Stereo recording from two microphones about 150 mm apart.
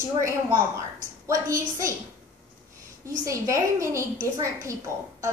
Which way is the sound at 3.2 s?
20° right (ahead or behind).